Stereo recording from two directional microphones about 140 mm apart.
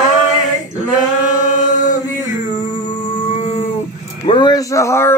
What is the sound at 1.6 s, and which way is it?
Chant, 65° left (ahead or behind).